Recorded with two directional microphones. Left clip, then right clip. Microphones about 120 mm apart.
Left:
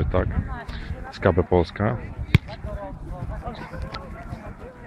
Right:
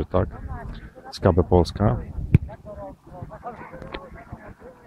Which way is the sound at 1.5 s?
35° right (ahead or behind).